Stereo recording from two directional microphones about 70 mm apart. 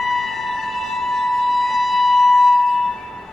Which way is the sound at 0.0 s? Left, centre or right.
Centre.